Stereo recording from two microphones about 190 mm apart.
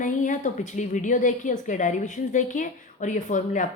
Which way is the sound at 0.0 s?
40° left (ahead or behind).